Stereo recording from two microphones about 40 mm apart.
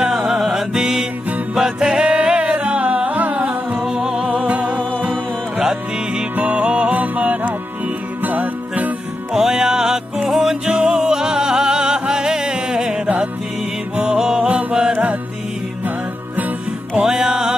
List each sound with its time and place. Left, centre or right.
0.0 s music: centre
2.1 s music: right
3.8 s music: centre
4.5 s music: right
5.6 s music: centre
6.3 s music: right
9.3 s music: centre
10.7 s music: right
11.0 s music: centre
14.9 s music: right
17.0 s music: centre